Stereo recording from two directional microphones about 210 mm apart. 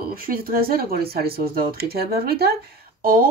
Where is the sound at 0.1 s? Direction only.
45° right (ahead or behind).